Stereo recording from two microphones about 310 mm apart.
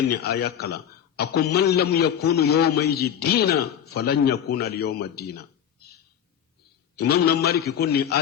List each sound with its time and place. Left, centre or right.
0.1 s a man's voice: left
7.0 s a man's voice: left